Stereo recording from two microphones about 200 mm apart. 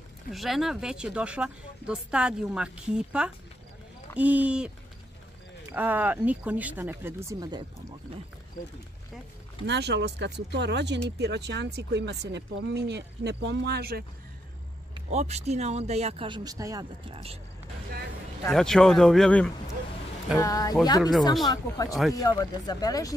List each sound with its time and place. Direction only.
0.3 s speech: centre (ahead or behind)
5.7 s speech: 10° right (ahead or behind)
9.7 s speech: 60° right (ahead or behind)
15.0 s speech: 35° right (ahead or behind); by 16.8 s 15° right (ahead or behind)
17.1 s speech: 30° right (ahead or behind)
18.5 s speech: centre (ahead or behind)
20.3 s speech: 20° left (ahead or behind)